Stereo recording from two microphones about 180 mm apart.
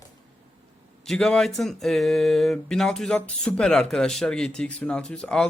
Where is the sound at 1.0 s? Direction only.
5° left (ahead or behind).